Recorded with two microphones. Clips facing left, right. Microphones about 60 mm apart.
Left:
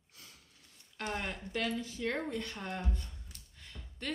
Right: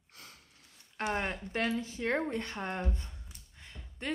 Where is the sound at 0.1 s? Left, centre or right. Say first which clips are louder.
Right 4 dB; right.